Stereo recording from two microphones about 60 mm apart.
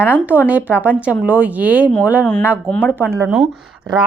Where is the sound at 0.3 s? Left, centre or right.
Right.